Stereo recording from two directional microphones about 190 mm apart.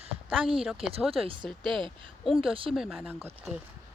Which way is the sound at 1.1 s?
30° right (ahead or behind).